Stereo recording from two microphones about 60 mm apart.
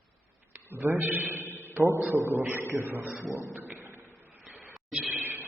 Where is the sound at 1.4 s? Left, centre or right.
Left.